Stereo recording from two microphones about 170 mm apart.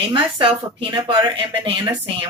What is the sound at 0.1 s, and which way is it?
Speech, 30° right (ahead or behind).